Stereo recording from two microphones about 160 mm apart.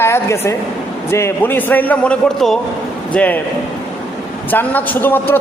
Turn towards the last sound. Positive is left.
turn(degrees=15)  # may be behind; listen again after turning